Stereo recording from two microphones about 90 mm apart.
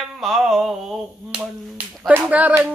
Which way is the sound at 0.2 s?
Centre (ahead or behind).